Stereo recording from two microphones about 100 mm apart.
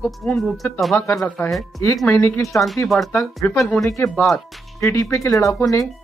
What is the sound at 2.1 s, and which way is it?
Speech, 25° left (ahead or behind).